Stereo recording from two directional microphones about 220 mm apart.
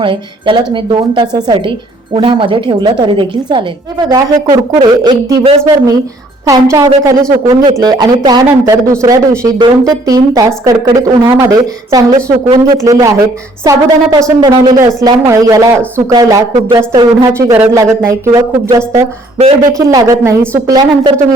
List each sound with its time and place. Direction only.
0.0 s speech: 20° right (ahead or behind)